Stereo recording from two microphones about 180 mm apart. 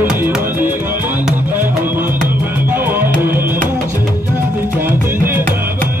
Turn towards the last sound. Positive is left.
turn(degrees=-10)  # may be behind; listen again after turning